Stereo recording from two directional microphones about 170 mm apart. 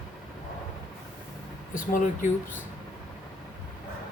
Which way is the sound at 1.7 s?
50° left (ahead or behind).